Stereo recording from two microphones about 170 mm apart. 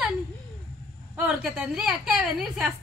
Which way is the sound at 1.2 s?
5° right (ahead or behind).